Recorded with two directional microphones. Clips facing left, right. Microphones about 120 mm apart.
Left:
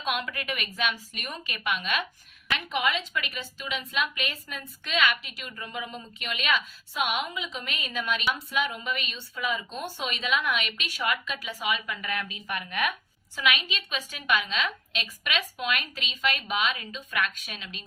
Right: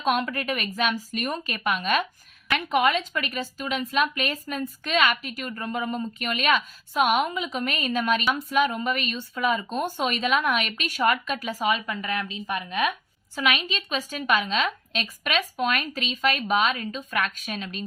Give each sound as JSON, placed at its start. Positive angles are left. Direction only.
{"t": 0.0, "sound": "a woman's voice", "side_deg": -40}
{"t": 13.3, "sound": "a woman's voice", "side_deg": -40}